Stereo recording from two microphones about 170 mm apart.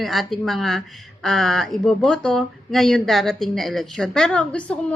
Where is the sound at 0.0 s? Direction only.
Centre (ahead or behind).